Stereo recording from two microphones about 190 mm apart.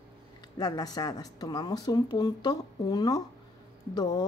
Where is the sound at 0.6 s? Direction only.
20° left (ahead or behind).